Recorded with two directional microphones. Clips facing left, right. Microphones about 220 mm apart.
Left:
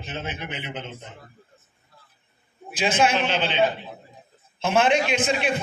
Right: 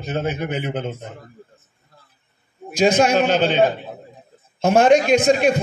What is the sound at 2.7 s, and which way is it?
A man's voice, 40° right (ahead or behind).